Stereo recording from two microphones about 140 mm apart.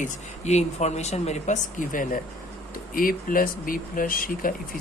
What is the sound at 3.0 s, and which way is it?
Speech, 90° left.